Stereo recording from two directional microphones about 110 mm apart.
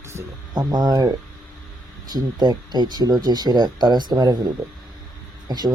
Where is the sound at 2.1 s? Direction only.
40° right (ahead or behind).